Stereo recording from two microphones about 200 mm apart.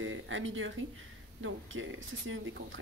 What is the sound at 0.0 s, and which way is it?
Speech, 75° right (ahead or behind).